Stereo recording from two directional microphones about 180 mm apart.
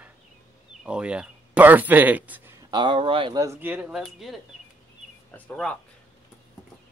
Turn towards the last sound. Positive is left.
turn(degrees=5)  # may be behind; listen again after turning